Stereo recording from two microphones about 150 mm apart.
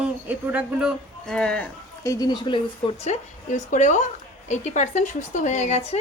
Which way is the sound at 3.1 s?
55° left (ahead or behind).